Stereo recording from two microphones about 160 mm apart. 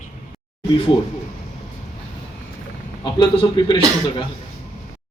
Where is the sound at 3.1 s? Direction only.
30° left (ahead or behind).